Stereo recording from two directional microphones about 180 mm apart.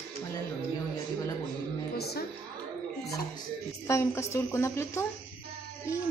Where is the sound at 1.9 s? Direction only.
60° left (ahead or behind).